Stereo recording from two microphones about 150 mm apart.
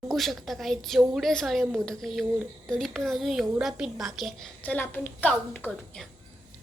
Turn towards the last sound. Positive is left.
turn(degrees=10)  # may be behind; listen again after turning